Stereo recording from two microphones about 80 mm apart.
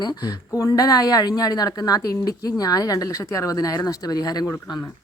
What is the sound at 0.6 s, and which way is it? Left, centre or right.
A woman's voice, left.